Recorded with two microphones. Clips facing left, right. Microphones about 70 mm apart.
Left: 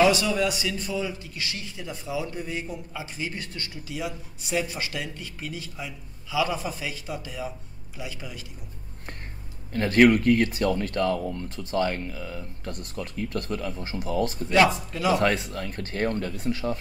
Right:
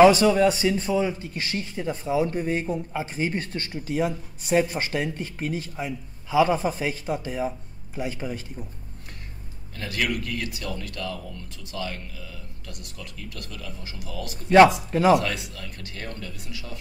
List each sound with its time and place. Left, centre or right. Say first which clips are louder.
0.0 s a man's voice: right 6 dB; right
9.8 s speech: left 10 dB; left
14.9 s a man's voice: right 6 dB; right
15.1 s speech: left 2 dB; left